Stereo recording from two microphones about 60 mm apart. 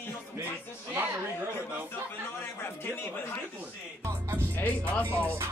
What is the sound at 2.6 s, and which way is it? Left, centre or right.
Speech, left.